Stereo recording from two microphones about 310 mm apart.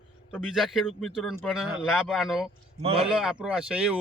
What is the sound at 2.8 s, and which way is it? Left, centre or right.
Speech, centre.